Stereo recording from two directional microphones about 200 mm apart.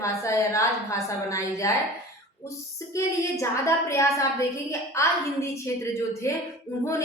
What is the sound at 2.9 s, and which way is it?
A woman's voice, 15° left (ahead or behind).